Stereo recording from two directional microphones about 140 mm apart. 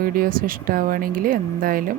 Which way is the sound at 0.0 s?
90° right.